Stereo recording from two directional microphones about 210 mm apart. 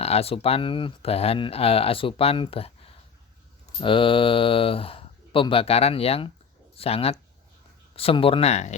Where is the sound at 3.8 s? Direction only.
25° left (ahead or behind).